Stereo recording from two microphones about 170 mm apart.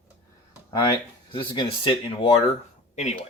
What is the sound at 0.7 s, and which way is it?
Speech, 25° left (ahead or behind).